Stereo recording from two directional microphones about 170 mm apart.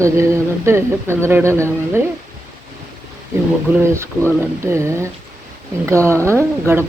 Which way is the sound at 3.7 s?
15° right (ahead or behind).